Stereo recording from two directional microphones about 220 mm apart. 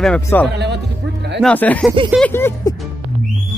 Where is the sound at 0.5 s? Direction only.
50° right (ahead or behind).